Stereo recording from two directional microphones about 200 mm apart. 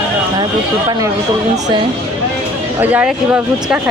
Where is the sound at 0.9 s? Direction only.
15° right (ahead or behind).